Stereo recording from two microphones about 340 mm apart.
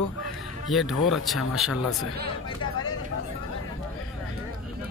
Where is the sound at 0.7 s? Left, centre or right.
Centre.